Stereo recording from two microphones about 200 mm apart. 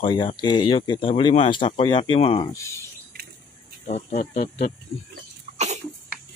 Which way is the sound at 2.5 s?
15° left (ahead or behind).